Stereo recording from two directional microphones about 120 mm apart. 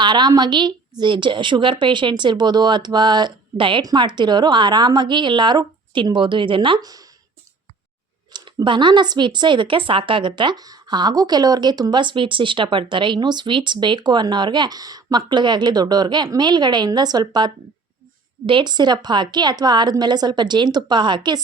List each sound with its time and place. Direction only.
0.0 s speech: 40° right (ahead or behind)
8.3 s speech: 35° right (ahead or behind)